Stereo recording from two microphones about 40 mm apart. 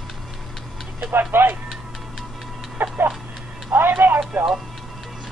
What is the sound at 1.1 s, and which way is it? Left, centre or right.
Speech, right.